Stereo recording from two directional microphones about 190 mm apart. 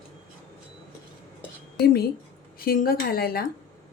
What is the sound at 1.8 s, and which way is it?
A woman's voice, 55° left (ahead or behind).